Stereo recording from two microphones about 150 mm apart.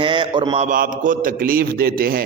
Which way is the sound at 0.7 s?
60° right (ahead or behind).